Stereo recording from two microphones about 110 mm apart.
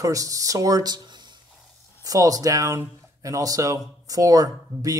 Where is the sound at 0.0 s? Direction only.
30° right (ahead or behind).